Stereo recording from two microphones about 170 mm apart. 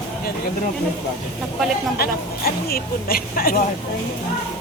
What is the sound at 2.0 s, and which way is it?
A woman's voice, 60° left (ahead or behind).